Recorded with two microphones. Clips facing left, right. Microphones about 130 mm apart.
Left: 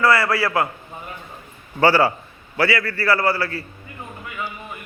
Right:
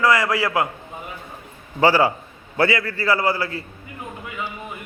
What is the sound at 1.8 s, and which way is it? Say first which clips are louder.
A man's voice: even; 15° right (ahead or behind).